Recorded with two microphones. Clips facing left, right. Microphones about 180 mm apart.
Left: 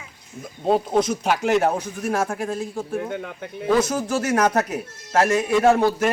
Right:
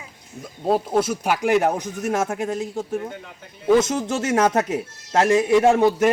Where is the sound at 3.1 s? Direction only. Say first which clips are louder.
Left 8 dB; 60° left (ahead or behind).